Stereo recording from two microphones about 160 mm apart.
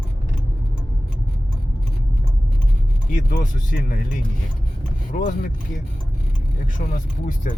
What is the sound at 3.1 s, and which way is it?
Speech, 60° left (ahead or behind).